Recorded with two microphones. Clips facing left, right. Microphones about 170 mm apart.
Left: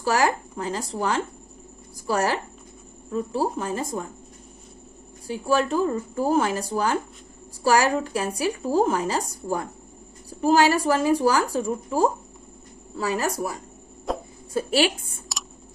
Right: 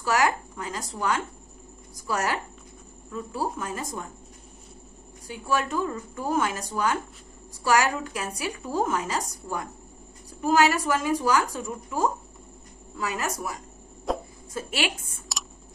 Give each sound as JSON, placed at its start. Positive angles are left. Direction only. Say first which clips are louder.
{"t": 0.0, "sound": "a woman's voice", "louder": "left 2 dB", "side_deg": 30}
{"t": 5.2, "sound": "a woman's voice", "louder": "left 5 dB", "side_deg": 30}
{"t": 14.1, "sound": "a sound", "louder": "even", "side_deg": 0}
{"t": 14.5, "sound": "a woman's voice", "louder": "left 8 dB", "side_deg": 30}